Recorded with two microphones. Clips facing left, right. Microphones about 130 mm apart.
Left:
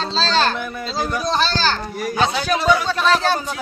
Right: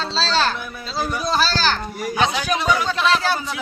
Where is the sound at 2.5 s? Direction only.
5° right (ahead or behind).